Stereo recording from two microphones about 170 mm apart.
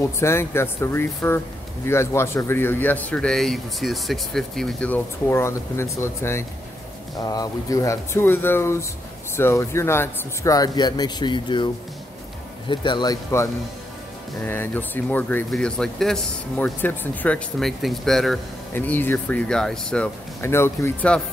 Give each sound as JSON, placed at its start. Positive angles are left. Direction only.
{"t": 0.2, "sound": "speech", "side_deg": 15}